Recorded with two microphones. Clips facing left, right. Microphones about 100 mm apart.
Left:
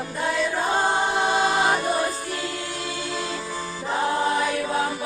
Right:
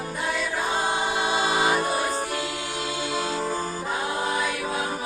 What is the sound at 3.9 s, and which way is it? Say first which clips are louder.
Choir: left 6 dB; 40° left (ahead or behind).